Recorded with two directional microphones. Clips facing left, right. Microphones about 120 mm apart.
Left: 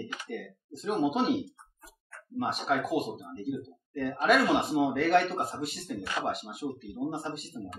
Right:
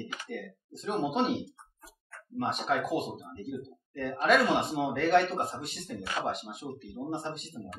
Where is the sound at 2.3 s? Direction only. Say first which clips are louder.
Left 1 dB; centre (ahead or behind).